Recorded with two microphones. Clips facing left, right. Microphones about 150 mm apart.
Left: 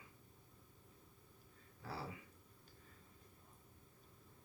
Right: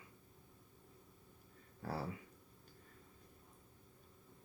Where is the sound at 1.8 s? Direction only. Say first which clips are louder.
Right 6 dB; 45° right (ahead or behind).